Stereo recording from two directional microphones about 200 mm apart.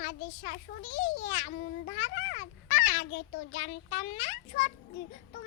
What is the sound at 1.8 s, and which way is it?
Speech, 55° left (ahead or behind).